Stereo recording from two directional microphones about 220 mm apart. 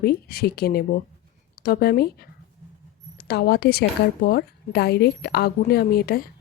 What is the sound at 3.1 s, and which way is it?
A woman's voice, 45° left (ahead or behind).